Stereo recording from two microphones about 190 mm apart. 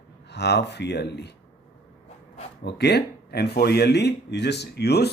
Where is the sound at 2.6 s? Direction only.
60° left (ahead or behind).